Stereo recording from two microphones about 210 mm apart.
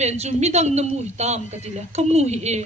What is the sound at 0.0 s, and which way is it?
Speech, 30° right (ahead or behind).